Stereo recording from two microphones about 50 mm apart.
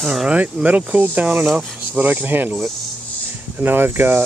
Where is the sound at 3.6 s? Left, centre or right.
Right.